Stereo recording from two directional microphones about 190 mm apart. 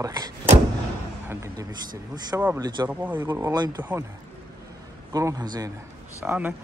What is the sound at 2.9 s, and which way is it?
Speech, 10° right (ahead or behind).